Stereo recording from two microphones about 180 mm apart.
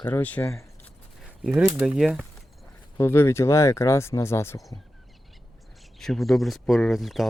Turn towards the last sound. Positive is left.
turn(degrees=0)  # may be behind; listen again after turning